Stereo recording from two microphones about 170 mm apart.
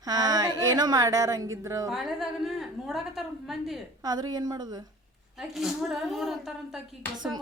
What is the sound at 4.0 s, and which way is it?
Speech, 25° right (ahead or behind).